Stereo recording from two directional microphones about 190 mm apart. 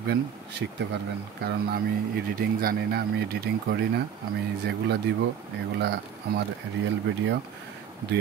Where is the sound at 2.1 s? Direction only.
55° right (ahead or behind).